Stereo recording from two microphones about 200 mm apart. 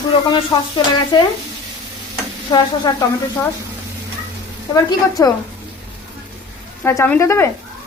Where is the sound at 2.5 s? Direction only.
15° left (ahead or behind).